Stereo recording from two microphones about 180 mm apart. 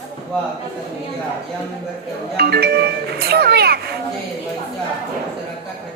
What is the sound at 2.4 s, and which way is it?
Speech, 60° right (ahead or behind).